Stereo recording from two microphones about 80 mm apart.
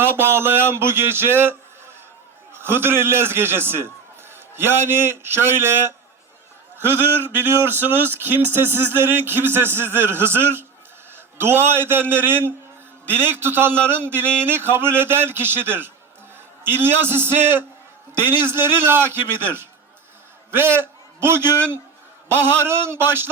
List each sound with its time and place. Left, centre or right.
0.0 s a man's voice: right
20.5 s a man's voice: right
22.6 s speech: right